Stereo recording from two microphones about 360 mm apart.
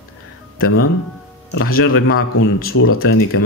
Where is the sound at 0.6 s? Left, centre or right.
Left.